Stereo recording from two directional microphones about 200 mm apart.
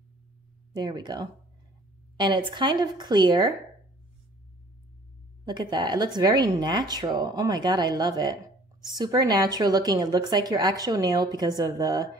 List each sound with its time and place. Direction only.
0.7 s a woman's voice: 20° right (ahead or behind)
5.4 s a woman's voice: 20° right (ahead or behind)